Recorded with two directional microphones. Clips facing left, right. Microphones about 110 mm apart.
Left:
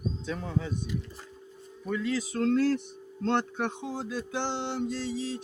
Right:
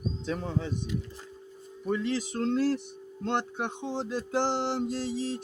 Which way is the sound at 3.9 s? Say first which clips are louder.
Right 3 dB; 35° right (ahead or behind).